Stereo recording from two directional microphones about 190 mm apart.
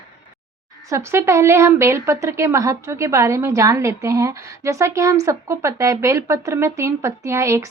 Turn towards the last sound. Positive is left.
turn(degrees=-15)  # may be behind; listen again after turning